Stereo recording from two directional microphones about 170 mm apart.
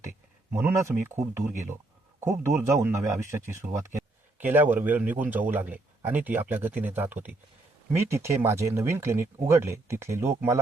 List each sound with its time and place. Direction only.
0.5 s a man's voice: 15° right (ahead or behind)